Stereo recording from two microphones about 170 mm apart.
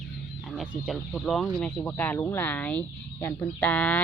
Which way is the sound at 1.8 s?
10° left (ahead or behind).